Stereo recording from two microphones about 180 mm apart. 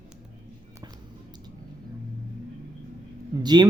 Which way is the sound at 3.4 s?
25° right (ahead or behind).